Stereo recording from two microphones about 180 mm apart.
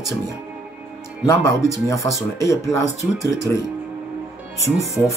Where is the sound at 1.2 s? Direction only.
15° left (ahead or behind).